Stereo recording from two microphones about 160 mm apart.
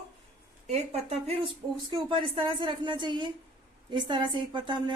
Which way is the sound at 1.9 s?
30° right (ahead or behind).